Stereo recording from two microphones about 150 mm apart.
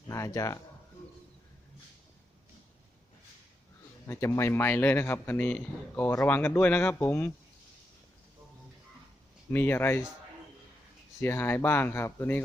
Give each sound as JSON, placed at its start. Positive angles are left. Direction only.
{"t": 0.1, "sound": "speech", "side_deg": 20}
{"t": 4.0, "sound": "speech", "side_deg": 20}
{"t": 9.5, "sound": "speech", "side_deg": 15}
{"t": 11.2, "sound": "speech", "side_deg": 15}